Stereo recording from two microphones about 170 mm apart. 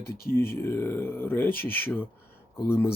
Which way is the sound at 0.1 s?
65° left (ahead or behind).